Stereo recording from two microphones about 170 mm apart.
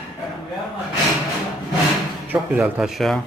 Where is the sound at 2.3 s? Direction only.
10° right (ahead or behind).